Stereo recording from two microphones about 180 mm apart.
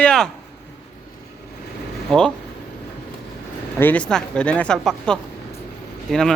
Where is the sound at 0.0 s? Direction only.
5° left (ahead or behind).